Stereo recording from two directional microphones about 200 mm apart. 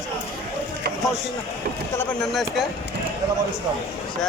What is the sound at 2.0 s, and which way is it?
Speech, 5° left (ahead or behind).